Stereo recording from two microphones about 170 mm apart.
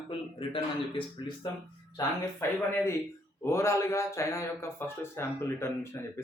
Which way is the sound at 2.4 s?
15° left (ahead or behind).